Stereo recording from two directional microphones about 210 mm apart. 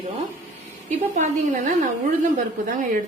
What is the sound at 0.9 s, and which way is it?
A woman's voice, 35° right (ahead or behind).